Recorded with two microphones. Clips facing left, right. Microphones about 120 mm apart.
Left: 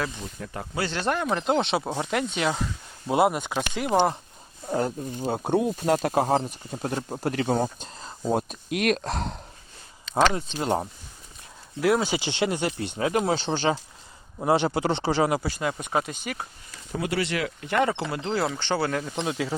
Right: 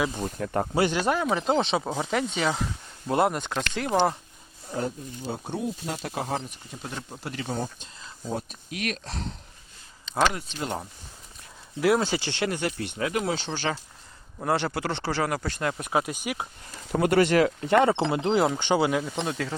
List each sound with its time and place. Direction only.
0.4 s speech: 60° right (ahead or behind)
0.9 s speech: 10° right (ahead or behind); by 4.2 s 15° left (ahead or behind)
4.7 s speech: 50° left (ahead or behind)
8.3 s speech: 60° left (ahead or behind)
10.3 s speech: 30° left (ahead or behind)
11.8 s speech: centre (ahead or behind)
12.0 s speech: 15° left (ahead or behind)
14.3 s speech: 15° left (ahead or behind)
15.4 s speech: 5° left (ahead or behind)
16.9 s speech: 55° right (ahead or behind)
17.7 s speech: 25° right (ahead or behind); by 19.1 s 10° right (ahead or behind)
19.1 s speech: 5° left (ahead or behind)